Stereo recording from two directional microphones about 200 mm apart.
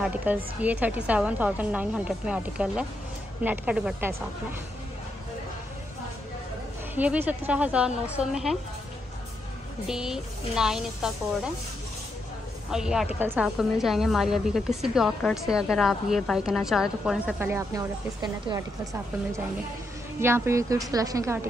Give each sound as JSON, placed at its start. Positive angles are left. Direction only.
{"t": 0.0, "sound": "a woman's voice", "side_deg": -10}
{"t": 7.0, "sound": "a woman's voice", "side_deg": -5}
{"t": 9.8, "sound": "a woman's voice", "side_deg": -5}
{"t": 12.7, "sound": "a woman's voice", "side_deg": -5}
{"t": 20.2, "sound": "a woman's voice", "side_deg": -10}